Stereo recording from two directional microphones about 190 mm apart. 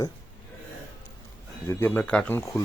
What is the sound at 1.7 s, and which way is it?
Speech, 10° left (ahead or behind).